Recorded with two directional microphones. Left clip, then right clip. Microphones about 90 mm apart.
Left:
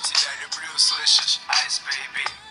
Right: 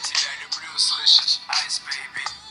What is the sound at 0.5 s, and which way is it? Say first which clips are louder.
Speech: left 1 dB; 50° left (ahead or behind).